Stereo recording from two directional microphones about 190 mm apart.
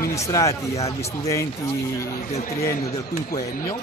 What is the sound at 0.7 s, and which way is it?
Speech, 35° left (ahead or behind).